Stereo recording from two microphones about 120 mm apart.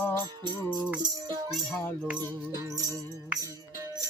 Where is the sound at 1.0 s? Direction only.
40° right (ahead or behind).